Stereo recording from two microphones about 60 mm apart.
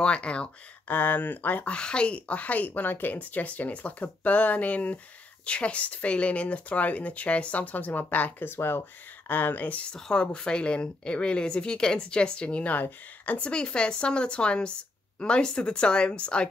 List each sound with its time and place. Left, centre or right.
0.0 s speech: centre
0.8 s speech: left
1.8 s speech: centre
8.5 s speech: left
9.3 s speech: left
9.9 s speech: centre; by 13.5 s left
13.5 s speech: centre